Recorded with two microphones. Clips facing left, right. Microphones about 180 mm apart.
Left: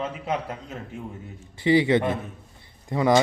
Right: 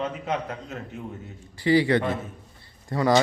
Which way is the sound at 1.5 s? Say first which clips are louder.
Left 1 dB; 20° left (ahead or behind).